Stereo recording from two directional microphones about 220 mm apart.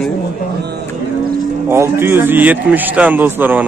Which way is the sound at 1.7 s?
10° right (ahead or behind).